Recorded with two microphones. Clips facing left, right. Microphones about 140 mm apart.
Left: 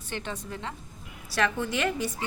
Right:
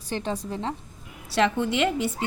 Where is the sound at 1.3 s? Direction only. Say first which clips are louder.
Right 5 dB; 25° right (ahead or behind).